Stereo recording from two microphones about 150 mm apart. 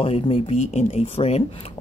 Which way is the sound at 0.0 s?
40° left (ahead or behind).